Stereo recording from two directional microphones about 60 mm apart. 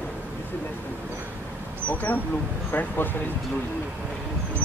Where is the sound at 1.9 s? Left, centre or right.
Left.